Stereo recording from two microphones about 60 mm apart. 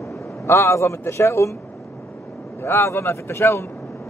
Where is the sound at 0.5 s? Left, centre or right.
Left.